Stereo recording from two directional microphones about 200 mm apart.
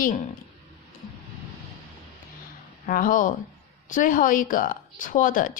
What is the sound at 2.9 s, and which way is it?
Speech, 45° left (ahead or behind).